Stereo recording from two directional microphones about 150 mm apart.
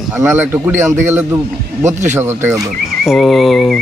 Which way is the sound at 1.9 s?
55° right (ahead or behind).